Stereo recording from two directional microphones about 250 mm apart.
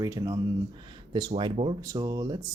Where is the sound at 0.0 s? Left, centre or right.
Centre.